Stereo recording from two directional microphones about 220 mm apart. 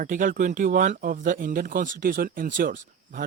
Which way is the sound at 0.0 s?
35° right (ahead or behind).